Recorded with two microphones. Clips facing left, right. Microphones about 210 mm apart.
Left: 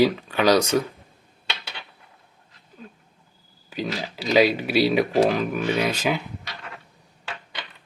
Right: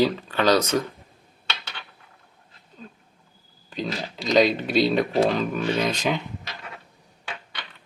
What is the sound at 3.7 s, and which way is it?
Speech, 10° left (ahead or behind).